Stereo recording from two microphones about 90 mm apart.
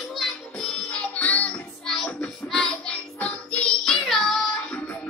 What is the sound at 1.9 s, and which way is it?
Music, 5° left (ahead or behind).